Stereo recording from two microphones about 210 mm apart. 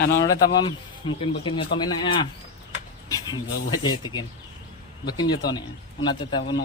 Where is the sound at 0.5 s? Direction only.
25° left (ahead or behind).